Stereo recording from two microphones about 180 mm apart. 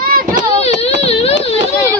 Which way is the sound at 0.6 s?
35° left (ahead or behind).